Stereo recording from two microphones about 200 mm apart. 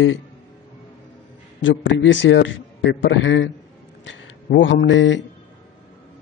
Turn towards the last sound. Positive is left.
turn(degrees=65)  # may be behind; listen again after turning